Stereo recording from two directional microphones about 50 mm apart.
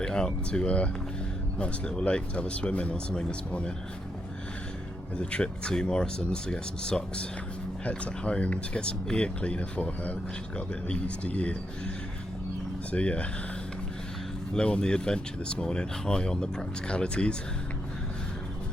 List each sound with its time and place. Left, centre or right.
0.0 s speech: centre
5.1 s speech: left
12.9 s speech: left
14.5 s speech: centre